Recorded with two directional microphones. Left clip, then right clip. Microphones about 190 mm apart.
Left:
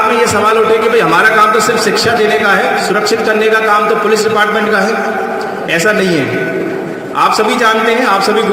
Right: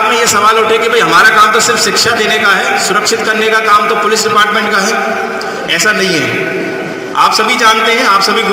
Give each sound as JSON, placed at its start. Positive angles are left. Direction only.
{"t": 0.9, "sound": "a man's voice", "side_deg": 55}
{"t": 5.7, "sound": "a man's voice", "side_deg": 60}
{"t": 7.3, "sound": "a man's voice", "side_deg": 60}